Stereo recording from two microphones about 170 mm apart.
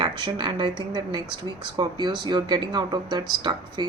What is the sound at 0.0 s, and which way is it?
A woman's voice, 25° right (ahead or behind).